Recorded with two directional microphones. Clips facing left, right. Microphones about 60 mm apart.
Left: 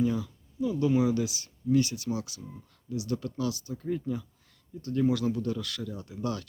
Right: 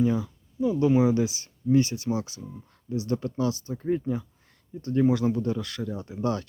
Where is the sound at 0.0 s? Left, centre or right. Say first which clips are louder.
Right 3 dB; right.